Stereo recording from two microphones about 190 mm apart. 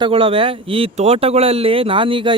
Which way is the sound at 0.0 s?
30° right (ahead or behind).